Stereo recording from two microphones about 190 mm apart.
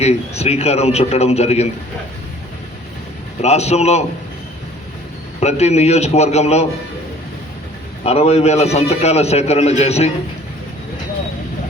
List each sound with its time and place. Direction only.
0.0 s a man's voice: 35° left (ahead or behind)
3.4 s a man's voice: 35° left (ahead or behind)
5.4 s a man's voice: 35° left (ahead or behind)
8.0 s a man's voice: 35° left (ahead or behind)